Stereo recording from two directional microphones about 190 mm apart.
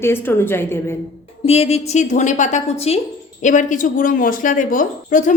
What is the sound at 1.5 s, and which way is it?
A woman's voice, 30° left (ahead or behind).